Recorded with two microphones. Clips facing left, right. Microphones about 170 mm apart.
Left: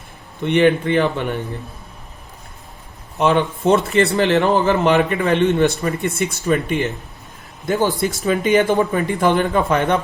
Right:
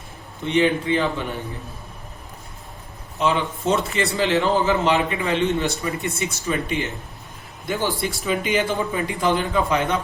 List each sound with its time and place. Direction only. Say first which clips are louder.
0.4 s speech: left 5 dB; 60° left (ahead or behind)
3.2 s speech: left 5 dB; 60° left (ahead or behind)
7.7 s speech: left 6 dB; 45° left (ahead or behind)